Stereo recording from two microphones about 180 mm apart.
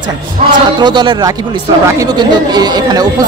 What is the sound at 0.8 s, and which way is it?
A man's voice, 25° right (ahead or behind).